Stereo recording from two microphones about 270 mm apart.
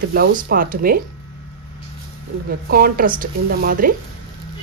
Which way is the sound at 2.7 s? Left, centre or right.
Right.